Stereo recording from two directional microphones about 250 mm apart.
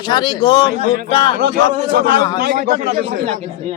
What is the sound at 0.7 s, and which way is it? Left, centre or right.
Speech, right.